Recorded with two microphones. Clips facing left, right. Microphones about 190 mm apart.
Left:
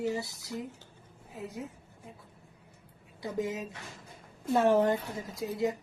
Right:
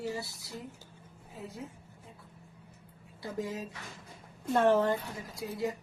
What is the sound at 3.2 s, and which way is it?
A woman's voice, 20° left (ahead or behind).